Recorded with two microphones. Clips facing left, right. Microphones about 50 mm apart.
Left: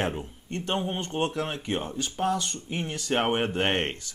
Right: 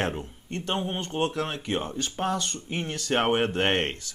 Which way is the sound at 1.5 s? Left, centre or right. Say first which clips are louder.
Right 1 dB; right.